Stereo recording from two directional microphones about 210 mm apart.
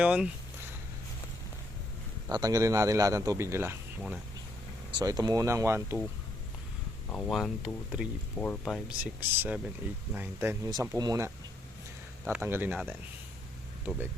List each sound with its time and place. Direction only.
0.0 s speech: 5° right (ahead or behind)
2.3 s a man's voice: 15° right (ahead or behind)
4.9 s a man's voice: 20° right (ahead or behind)
7.1 s speech: 5° left (ahead or behind)
9.3 s a man's voice: 10° right (ahead or behind)